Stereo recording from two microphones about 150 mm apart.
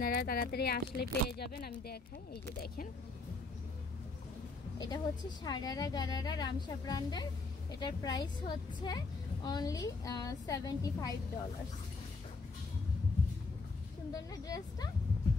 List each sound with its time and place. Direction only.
0.0 s speech: 80° left
4.7 s a woman's voice: 25° left (ahead or behind)
14.1 s a woman's voice: 25° left (ahead or behind)